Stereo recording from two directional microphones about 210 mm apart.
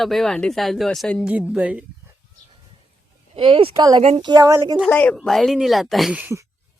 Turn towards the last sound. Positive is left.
turn(degrees=0)  # may be behind; listen again after turning